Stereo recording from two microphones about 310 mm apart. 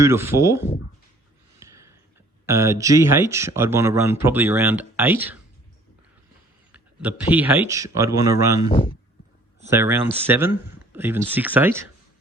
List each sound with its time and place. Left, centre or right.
0.0 s speech: centre
1.5 s a sound: centre
2.5 s speech: centre
6.7 s speech: centre
8.7 s speech: centre
9.6 s speech: centre